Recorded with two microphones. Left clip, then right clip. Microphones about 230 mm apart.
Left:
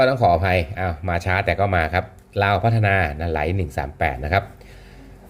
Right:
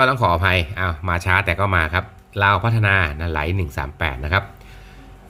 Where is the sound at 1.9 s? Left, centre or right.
Right.